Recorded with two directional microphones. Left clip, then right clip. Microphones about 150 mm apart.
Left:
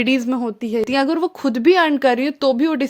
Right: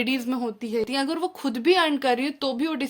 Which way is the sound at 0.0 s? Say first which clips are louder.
Left 7 dB; 45° left (ahead or behind).